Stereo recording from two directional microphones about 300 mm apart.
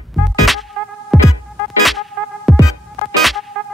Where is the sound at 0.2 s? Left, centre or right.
Centre.